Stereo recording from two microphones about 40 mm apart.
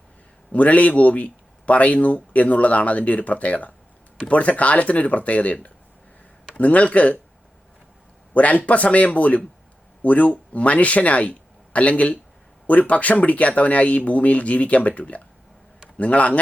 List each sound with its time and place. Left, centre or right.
0.5 s speech: left
6.6 s speech: left
8.3 s speech: left